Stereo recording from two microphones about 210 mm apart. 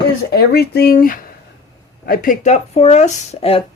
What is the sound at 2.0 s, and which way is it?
Speech, 45° left (ahead or behind).